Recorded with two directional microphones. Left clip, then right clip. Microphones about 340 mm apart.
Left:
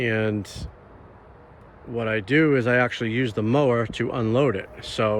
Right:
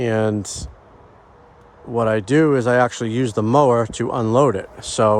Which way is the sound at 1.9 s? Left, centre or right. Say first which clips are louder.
Right 5 dB; centre.